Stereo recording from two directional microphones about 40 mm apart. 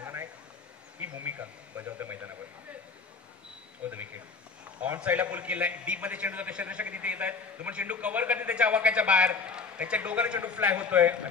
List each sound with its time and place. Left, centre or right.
0.0 s a sound: right
1.0 s speech: right
3.8 s speech: right
5.0 s a man's voice: right